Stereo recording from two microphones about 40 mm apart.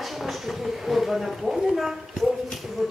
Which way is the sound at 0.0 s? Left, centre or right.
Centre.